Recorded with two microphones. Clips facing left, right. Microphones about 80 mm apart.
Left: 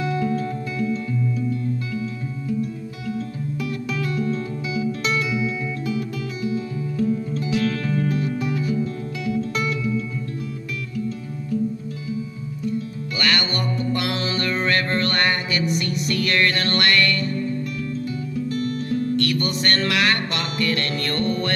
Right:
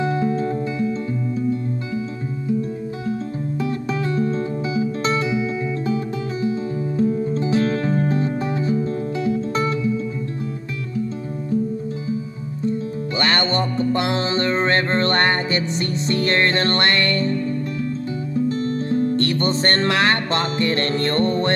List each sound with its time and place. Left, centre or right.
0.0 s music: right
3.1 s music: right
7.0 s music: right
12.6 s music: right